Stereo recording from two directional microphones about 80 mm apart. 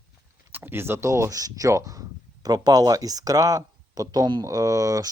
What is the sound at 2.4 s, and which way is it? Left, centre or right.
Speech, right.